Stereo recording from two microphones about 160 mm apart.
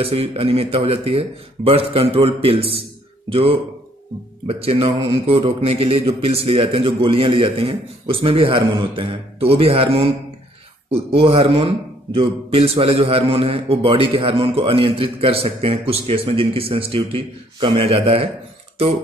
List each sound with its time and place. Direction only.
0.0 s a man's voice: 35° right (ahead or behind)
11.1 s a man's voice: 35° right (ahead or behind)